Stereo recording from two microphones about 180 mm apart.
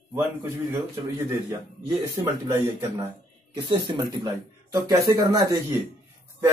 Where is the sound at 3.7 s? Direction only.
25° right (ahead or behind).